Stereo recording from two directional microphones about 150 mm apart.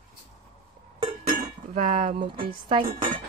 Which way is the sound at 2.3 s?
35° right (ahead or behind).